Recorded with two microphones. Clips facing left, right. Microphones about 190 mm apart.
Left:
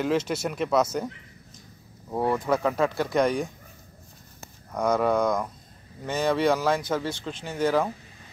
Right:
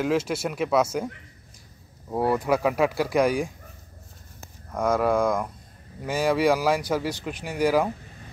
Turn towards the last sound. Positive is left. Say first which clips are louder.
# right 2 dB
turn(degrees=-10)  # may be behind; listen again after turning